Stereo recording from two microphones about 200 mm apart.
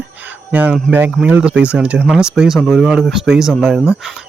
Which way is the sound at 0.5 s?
5° right (ahead or behind).